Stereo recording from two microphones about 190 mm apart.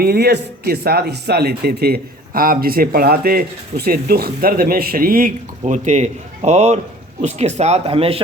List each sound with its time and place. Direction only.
0.0 s speech: 55° right (ahead or behind); by 8.2 s 30° right (ahead or behind)